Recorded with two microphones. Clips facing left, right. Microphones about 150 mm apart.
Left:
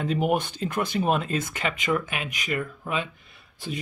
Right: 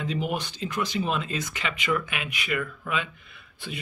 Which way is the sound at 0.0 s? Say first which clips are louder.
Left 5 dB; 50° left (ahead or behind).